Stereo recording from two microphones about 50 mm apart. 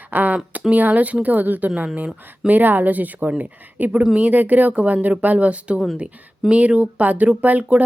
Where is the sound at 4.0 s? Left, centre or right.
Right.